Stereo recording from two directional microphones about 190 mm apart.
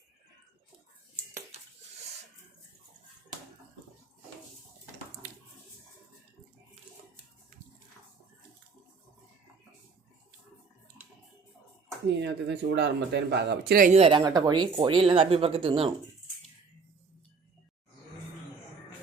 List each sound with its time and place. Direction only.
12.0 s speech: 65° right (ahead or behind); by 14.0 s 45° right (ahead or behind)
14.0 s speech: 20° right (ahead or behind)